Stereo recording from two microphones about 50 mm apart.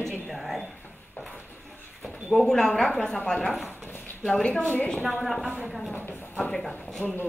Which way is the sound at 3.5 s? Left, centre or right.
Centre.